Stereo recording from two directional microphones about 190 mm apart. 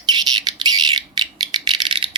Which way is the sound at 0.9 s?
30° right (ahead or behind).